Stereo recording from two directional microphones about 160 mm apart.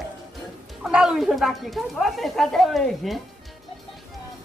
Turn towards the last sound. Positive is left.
turn(degrees=0)  # may be behind; listen again after turning